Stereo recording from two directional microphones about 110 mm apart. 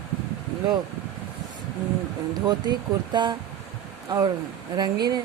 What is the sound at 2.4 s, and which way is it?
Speech, 40° right (ahead or behind).